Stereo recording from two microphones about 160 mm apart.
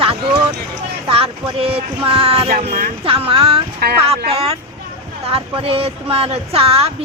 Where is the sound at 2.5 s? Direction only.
65° right (ahead or behind).